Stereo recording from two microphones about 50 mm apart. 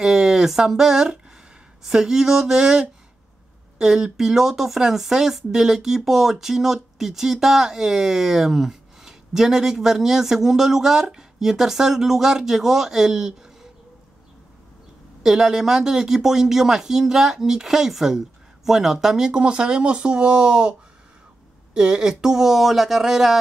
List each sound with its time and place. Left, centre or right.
0.0 s speech: centre
15.2 s speech: centre
21.7 s speech: centre